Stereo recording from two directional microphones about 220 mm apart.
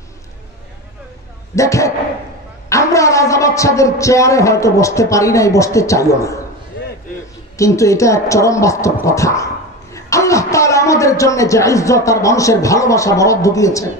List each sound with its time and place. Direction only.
1.5 s speech: 15° left (ahead or behind)
6.8 s a sound: 50° left (ahead or behind)
7.5 s a man's voice: 15° left (ahead or behind)